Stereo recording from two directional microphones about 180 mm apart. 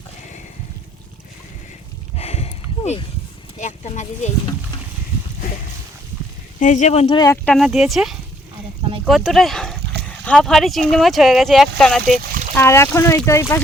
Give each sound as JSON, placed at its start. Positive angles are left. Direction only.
{"t": 2.1, "sound": "a sound", "side_deg": 35}
{"t": 3.6, "sound": "speech", "side_deg": 40}
{"t": 6.6, "sound": "speech", "side_deg": 45}
{"t": 7.4, "sound": "speech", "side_deg": 0}
{"t": 12.5, "sound": "speech", "side_deg": 15}